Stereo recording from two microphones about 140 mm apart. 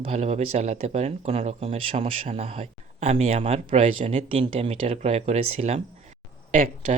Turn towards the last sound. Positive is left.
turn(degrees=-80)